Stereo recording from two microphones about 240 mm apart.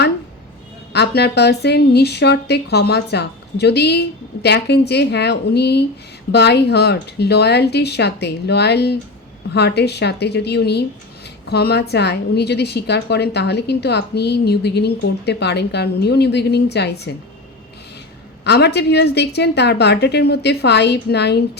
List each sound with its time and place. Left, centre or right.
0.9 s a woman's voice: left
18.4 s a woman's voice: left